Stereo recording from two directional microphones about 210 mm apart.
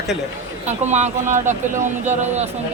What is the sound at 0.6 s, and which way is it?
Speech, 35° right (ahead or behind).